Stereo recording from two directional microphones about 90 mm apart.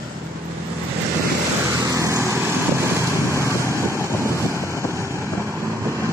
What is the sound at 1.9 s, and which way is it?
Vehicle, 35° right (ahead or behind).